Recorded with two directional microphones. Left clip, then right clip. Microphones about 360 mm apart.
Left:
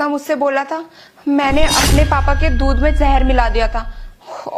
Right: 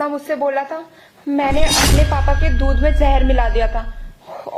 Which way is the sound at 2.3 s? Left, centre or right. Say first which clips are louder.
Left 3 dB; left.